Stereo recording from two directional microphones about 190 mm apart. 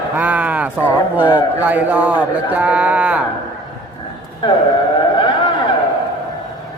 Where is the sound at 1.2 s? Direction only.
25° left (ahead or behind).